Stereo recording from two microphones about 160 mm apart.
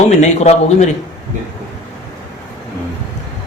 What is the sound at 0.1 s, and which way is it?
Speech, 45° left (ahead or behind).